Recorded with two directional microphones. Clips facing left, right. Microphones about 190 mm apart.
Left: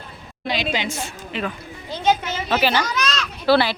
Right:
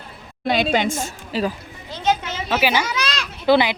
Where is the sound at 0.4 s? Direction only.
50° right (ahead or behind); by 1.5 s 35° right (ahead or behind).